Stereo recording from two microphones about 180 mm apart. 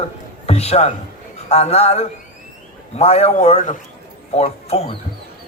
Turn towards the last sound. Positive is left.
turn(degrees=35)  # may be behind; listen again after turning